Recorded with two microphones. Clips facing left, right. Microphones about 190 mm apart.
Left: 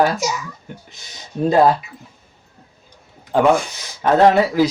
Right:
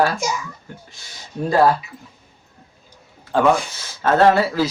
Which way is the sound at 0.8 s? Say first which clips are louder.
Left 1 dB; 20° left (ahead or behind).